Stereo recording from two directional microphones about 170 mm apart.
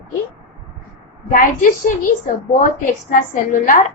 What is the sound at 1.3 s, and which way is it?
A woman's voice, 55° left (ahead or behind).